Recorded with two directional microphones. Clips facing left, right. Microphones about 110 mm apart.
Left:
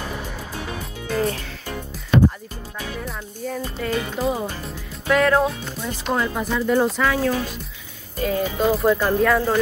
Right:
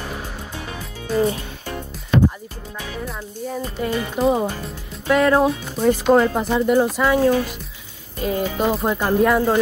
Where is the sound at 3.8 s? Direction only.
15° right (ahead or behind).